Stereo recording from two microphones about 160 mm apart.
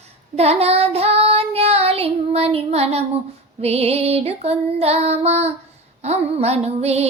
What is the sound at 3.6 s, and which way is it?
Female singing, 40° right (ahead or behind).